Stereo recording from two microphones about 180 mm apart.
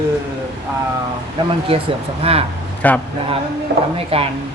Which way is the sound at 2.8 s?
10° left (ahead or behind).